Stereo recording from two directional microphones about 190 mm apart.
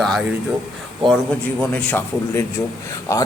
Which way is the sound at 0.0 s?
Centre (ahead or behind).